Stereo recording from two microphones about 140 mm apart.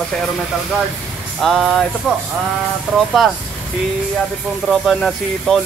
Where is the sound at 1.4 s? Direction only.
Centre (ahead or behind).